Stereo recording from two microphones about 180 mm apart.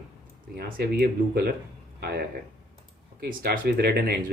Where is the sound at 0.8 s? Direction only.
60° right (ahead or behind).